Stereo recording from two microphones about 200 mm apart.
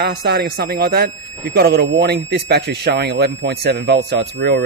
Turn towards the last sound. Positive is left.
turn(degrees=-60)  # may be behind; listen again after turning